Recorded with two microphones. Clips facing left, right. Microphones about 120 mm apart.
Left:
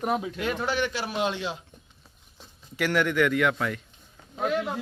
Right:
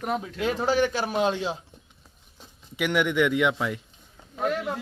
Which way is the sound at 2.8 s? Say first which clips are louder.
Right 1 dB; 15° right (ahead or behind).